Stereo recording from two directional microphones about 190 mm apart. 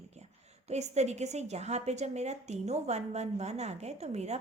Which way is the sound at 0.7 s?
35° right (ahead or behind).